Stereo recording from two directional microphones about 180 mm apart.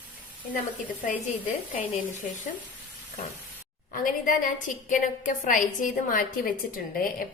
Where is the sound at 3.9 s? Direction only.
50° left (ahead or behind).